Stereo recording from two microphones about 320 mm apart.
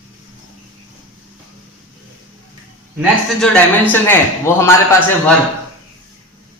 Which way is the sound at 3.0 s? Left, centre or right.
Centre.